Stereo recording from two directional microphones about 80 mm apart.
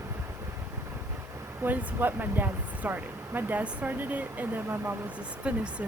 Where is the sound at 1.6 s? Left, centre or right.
Right.